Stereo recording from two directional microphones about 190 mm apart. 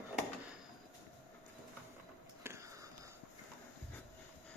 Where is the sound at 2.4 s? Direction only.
15° right (ahead or behind).